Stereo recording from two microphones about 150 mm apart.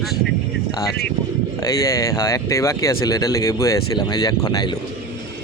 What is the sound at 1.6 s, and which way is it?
Speech, 20° left (ahead or behind).